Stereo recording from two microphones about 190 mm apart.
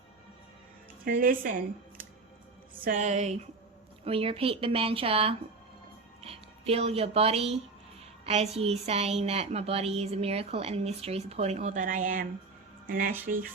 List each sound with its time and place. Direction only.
1.0 s a woman's voice: 50° right (ahead or behind)
2.8 s a woman's voice: 40° right (ahead or behind)